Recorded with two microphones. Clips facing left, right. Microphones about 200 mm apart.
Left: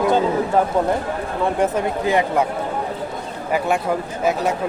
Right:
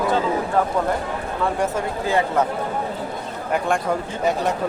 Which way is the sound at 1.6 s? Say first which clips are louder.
Left 4 dB; 20° left (ahead or behind).